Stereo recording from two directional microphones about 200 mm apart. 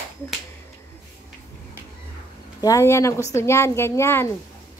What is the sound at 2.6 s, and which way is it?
A child's voice, 15° left (ahead or behind).